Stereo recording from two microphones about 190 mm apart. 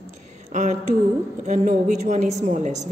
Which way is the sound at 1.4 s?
40° right (ahead or behind).